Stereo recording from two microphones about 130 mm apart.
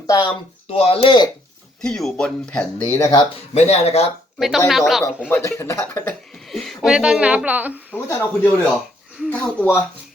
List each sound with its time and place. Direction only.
0.1 s speech: 35° left (ahead or behind)
0.8 s speech: 50° left (ahead or behind)
1.8 s speech: 5° left (ahead or behind)
2.9 s speech: 20° left (ahead or behind)
3.5 s speech: 55° left (ahead or behind)
4.4 s speech: centre (ahead or behind)
5.3 s speech: 20° left (ahead or behind)
6.5 s a sound: centre (ahead or behind)
6.8 s speech: 5° right (ahead or behind)
7.9 s speech: 10° left (ahead or behind)
8.7 s a sound: 5° right (ahead or behind)
9.3 s speech: 15° left (ahead or behind)